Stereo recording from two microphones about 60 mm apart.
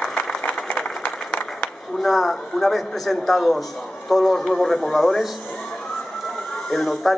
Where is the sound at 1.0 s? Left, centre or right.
Left.